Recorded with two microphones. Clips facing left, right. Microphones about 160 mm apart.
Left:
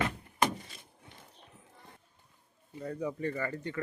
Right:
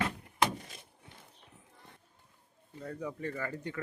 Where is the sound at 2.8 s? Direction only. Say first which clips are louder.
Left 4 dB; 5° left (ahead or behind).